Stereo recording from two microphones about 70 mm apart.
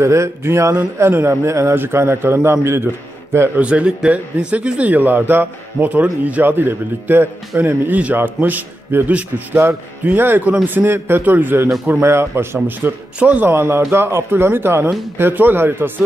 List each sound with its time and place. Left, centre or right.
0.0 s a man's voice: right
3.5 s a man's voice: centre; by 12.4 s right
12.8 s a man's voice: right
13.5 s a man's voice: right